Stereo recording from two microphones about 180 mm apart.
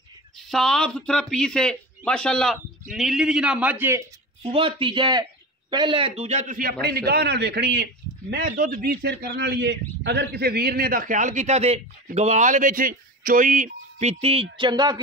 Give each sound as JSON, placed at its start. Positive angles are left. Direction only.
{"t": 0.5, "sound": "speech", "side_deg": 0}
{"t": 4.4, "sound": "a man's voice", "side_deg": -30}